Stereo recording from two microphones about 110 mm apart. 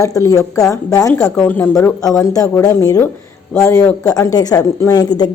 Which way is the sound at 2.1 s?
30° left (ahead or behind).